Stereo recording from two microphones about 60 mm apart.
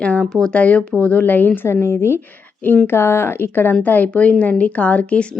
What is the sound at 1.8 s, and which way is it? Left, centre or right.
Speech, left.